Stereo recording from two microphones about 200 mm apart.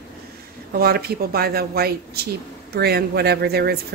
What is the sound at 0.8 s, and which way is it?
Speech, 50° right (ahead or behind).